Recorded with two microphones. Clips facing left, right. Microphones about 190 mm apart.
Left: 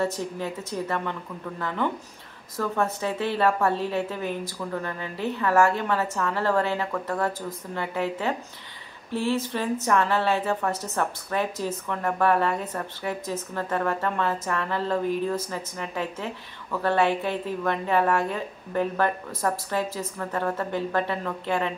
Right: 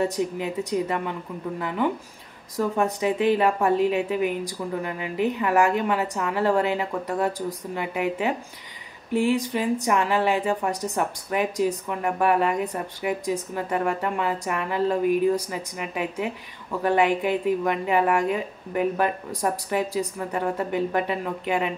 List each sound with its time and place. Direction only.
0.0 s speech: 15° right (ahead or behind)